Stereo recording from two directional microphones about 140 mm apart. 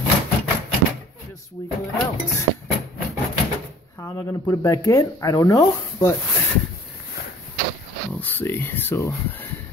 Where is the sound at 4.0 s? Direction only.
20° left (ahead or behind).